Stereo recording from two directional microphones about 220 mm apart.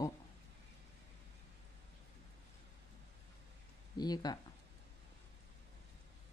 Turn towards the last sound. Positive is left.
turn(degrees=20)  # may be behind; listen again after turning